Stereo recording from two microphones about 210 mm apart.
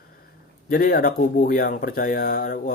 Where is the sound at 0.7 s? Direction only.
45° left (ahead or behind).